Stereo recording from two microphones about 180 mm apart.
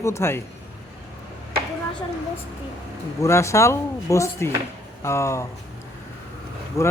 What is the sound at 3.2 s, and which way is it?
Speech, 15° left (ahead or behind).